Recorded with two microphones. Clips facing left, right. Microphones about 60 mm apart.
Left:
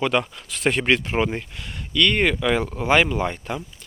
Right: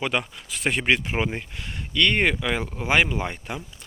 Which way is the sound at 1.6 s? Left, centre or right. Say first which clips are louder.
Left 2 dB; right.